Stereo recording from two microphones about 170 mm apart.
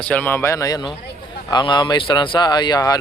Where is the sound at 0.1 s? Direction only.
10° left (ahead or behind).